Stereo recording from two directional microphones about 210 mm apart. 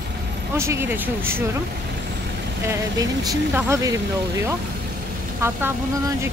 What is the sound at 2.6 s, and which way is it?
Speech, 15° right (ahead or behind).